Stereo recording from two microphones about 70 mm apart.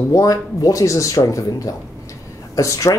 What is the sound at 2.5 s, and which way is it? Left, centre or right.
Speech, left.